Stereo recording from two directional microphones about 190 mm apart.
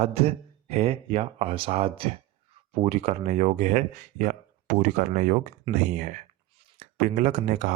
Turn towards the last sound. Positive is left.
turn(degrees=-40)  # may be behind; listen again after turning